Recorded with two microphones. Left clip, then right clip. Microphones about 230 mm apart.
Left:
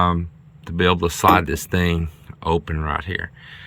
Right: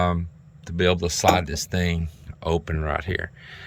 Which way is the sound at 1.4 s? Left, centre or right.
Centre.